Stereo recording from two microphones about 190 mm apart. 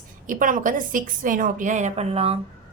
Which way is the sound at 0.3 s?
45° right (ahead or behind).